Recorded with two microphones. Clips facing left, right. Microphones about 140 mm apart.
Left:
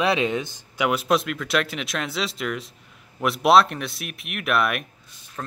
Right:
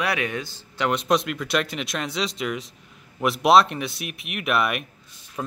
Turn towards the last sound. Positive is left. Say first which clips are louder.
# right 3 dB
turn(degrees=-10)  # may be behind; listen again after turning